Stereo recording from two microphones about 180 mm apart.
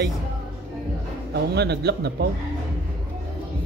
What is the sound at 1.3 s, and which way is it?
Speech, 65° right (ahead or behind).